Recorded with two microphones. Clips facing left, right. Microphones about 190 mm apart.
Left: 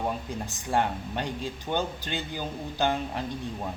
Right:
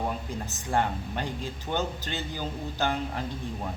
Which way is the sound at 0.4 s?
15° left (ahead or behind).